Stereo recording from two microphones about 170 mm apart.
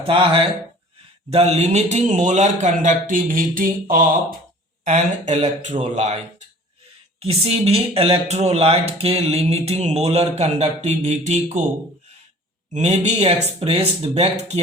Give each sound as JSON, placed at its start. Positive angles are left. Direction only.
{"t": 0.0, "sound": "speech", "side_deg": -30}
{"t": 4.9, "sound": "speech", "side_deg": -45}
{"t": 7.2, "sound": "speech", "side_deg": -35}
{"t": 12.7, "sound": "speech", "side_deg": -45}